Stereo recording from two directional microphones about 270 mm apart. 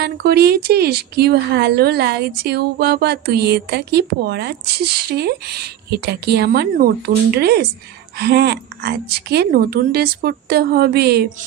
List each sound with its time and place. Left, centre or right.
0.0 s speech: right